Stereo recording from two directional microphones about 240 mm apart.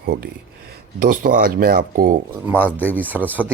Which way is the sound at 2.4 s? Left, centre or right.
Centre.